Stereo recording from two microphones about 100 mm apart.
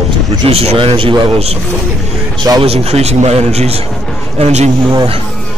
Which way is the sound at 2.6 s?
90° right.